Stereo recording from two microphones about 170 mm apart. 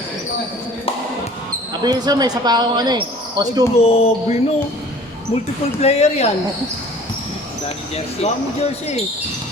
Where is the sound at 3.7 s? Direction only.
35° left (ahead or behind).